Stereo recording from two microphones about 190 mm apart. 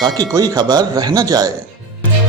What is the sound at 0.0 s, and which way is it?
Speech, 20° right (ahead or behind).